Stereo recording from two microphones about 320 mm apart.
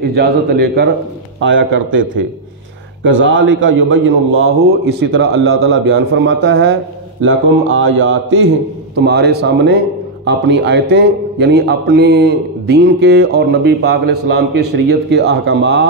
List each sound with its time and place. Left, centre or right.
0.0 s a man's voice: right